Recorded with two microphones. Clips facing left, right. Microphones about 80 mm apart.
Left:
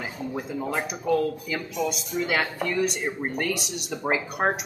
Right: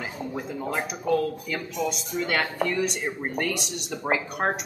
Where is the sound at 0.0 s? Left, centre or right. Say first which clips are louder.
Left 1 dB; centre.